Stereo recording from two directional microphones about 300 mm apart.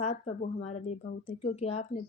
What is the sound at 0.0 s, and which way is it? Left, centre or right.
Speech, left.